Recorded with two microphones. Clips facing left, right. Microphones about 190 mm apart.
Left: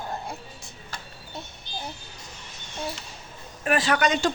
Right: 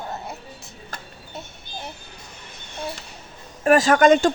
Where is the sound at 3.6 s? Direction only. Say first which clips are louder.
Right 8 dB; 45° right (ahead or behind).